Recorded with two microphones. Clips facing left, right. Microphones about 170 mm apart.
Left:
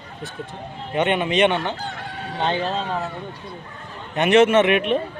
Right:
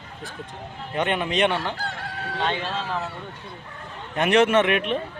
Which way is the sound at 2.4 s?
20° left (ahead or behind).